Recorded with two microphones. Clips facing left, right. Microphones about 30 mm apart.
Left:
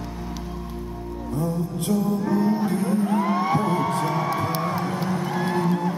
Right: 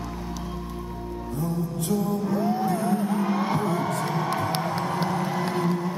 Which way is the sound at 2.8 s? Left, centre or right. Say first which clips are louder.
Left 2 dB; left.